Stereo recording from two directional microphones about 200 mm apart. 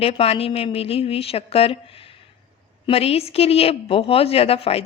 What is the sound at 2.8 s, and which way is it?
Speech, 30° left (ahead or behind).